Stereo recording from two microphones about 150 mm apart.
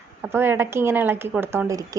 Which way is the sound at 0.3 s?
15° right (ahead or behind).